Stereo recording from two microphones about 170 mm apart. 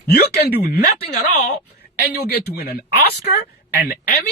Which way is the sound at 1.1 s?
45° left (ahead or behind).